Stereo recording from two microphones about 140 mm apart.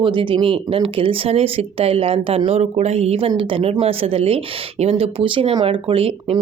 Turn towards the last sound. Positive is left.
turn(degrees=-45)  # may be behind; listen again after turning